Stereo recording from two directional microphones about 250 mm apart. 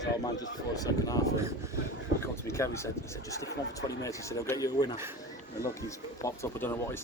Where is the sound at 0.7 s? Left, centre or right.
Centre.